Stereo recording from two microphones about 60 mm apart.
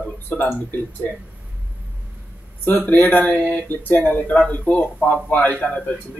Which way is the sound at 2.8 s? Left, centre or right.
Left.